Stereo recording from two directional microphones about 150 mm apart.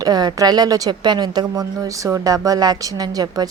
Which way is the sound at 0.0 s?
25° right (ahead or behind).